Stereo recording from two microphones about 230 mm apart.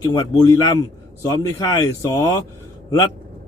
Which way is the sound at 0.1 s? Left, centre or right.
Centre.